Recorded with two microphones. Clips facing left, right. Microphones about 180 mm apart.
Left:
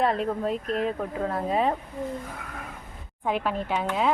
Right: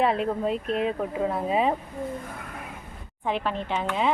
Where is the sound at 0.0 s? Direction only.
5° right (ahead or behind).